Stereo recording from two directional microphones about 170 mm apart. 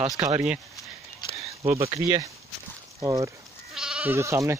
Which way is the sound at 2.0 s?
20° right (ahead or behind).